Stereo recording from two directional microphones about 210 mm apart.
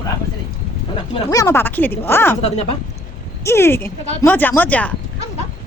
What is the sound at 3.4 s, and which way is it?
A woman's voice, 10° left (ahead or behind).